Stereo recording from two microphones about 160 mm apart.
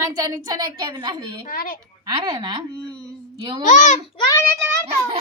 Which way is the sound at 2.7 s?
5° left (ahead or behind).